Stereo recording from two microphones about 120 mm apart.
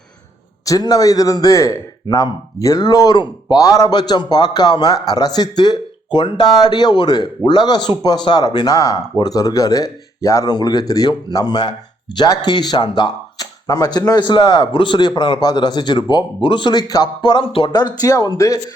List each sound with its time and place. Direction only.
0.6 s speech: 30° left (ahead or behind)